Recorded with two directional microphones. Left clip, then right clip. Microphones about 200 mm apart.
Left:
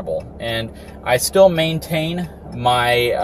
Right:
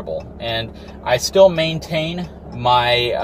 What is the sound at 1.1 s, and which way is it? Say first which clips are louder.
Speech: even; 20° left (ahead or behind).